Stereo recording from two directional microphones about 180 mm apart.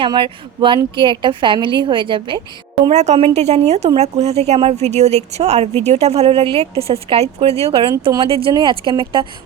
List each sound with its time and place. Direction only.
0.0 s a woman's voice: 30° right (ahead or behind)
2.9 s a woman's voice: 40° right (ahead or behind)